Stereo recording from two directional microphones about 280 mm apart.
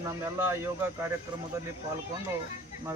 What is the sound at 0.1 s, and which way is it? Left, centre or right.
Speech, centre.